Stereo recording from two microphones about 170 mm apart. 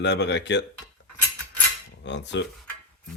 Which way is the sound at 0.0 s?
90° left.